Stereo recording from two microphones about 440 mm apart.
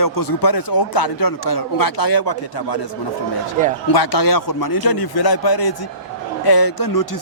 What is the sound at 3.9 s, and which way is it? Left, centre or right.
Speech, left.